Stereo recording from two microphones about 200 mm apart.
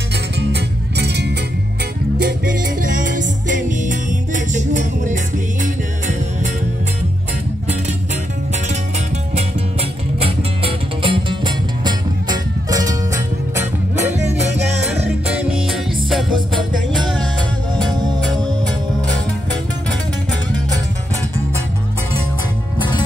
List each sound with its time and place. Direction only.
0.4 s music: 55° right (ahead or behind)
2.2 s music: 45° right (ahead or behind)
9.3 s music: 30° right (ahead or behind)
14.9 s music: 5° right (ahead or behind)